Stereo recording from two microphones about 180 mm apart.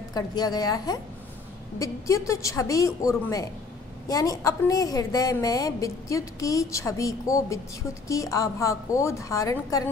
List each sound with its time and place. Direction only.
0.1 s a woman's voice: 20° left (ahead or behind)